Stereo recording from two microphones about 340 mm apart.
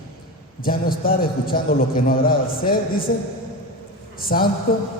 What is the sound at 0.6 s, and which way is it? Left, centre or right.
A man's voice, left.